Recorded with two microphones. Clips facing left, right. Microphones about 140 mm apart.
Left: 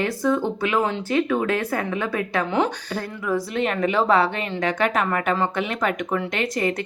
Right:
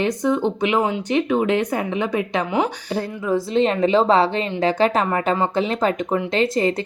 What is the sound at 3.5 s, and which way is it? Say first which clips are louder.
A woman's voice: right 7 dB; 25° right (ahead or behind).